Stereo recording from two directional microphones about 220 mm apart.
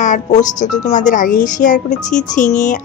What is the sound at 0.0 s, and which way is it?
Speech, 35° left (ahead or behind).